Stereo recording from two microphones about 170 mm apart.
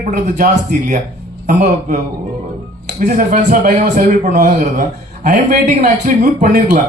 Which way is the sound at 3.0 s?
50° right (ahead or behind).